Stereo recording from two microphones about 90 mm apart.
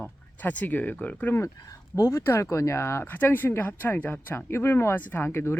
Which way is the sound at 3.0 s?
20° left (ahead or behind).